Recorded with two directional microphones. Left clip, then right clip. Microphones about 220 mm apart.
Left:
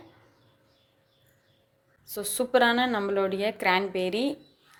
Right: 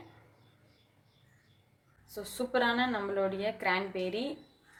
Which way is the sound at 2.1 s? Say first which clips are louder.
Left 8 dB; 45° left (ahead or behind).